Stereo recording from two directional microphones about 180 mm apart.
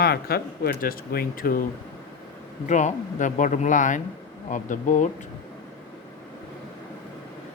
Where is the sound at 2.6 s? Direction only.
40° left (ahead or behind).